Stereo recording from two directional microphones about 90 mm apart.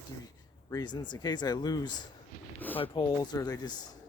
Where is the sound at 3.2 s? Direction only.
45° left (ahead or behind).